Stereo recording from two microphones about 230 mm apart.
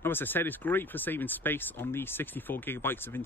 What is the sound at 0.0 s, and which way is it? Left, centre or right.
Speech, centre.